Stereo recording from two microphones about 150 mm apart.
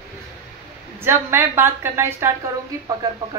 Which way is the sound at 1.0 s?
15° right (ahead or behind).